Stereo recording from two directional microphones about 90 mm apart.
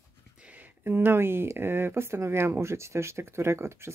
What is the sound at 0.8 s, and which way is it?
Speech, 25° right (ahead or behind).